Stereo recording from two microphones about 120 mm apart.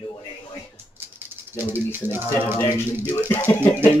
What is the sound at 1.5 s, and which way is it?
Speech, 15° right (ahead or behind).